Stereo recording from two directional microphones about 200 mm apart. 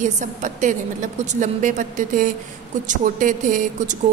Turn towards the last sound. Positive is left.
turn(degrees=-40)  # may be behind; listen again after turning